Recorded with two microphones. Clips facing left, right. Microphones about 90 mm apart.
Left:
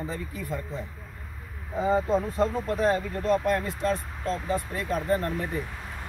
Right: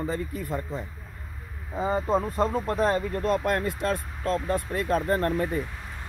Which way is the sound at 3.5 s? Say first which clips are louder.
Even; 55° right (ahead or behind).